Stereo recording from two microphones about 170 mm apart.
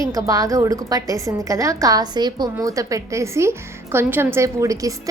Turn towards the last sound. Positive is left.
turn(degrees=-20)  # may be behind; listen again after turning